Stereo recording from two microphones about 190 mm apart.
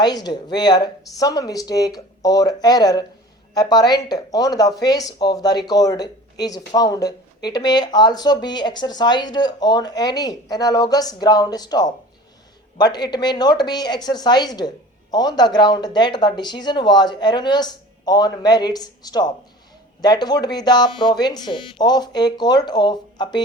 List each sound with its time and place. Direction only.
0.0 s speech: 20° left (ahead or behind)